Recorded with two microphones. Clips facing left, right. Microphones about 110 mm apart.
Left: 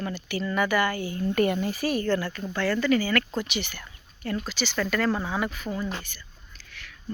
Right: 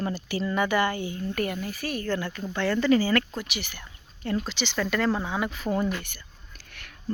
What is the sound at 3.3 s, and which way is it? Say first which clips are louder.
Speech: left 4 dB; 5° right (ahead or behind).